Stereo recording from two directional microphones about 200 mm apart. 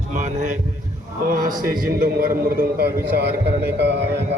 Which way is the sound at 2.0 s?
45° right (ahead or behind).